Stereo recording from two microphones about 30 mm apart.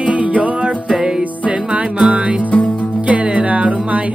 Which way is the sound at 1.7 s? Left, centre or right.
Right.